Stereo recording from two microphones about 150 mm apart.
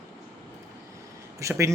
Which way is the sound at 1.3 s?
20° right (ahead or behind).